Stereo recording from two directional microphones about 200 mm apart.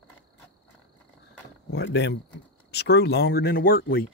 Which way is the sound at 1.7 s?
60° left (ahead or behind).